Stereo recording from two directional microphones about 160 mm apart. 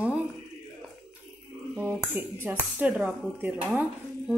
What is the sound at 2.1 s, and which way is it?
Speech, 10° right (ahead or behind).